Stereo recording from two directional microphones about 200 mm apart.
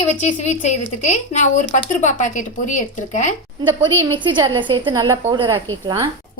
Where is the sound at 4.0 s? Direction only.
25° right (ahead or behind).